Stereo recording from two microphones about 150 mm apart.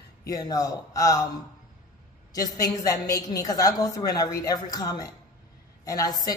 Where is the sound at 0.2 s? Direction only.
25° left (ahead or behind).